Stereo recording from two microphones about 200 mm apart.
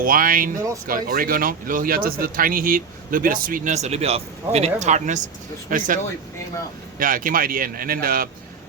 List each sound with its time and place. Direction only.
0.0 s speech: 45° right (ahead or behind)
7.0 s speech: 45° right (ahead or behind)